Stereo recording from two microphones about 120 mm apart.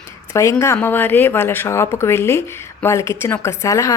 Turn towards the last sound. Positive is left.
turn(degrees=25)  # may be behind; listen again after turning